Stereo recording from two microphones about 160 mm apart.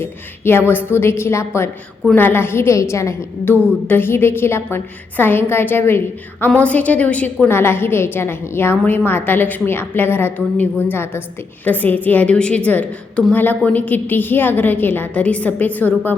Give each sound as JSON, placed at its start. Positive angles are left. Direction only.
{"t": 0.0, "sound": "a woman's voice", "side_deg": 15}